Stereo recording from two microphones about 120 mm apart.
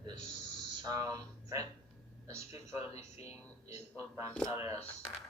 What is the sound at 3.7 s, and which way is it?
Speech, 20° right (ahead or behind).